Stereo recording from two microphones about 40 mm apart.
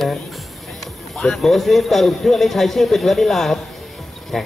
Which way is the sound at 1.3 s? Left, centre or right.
Centre.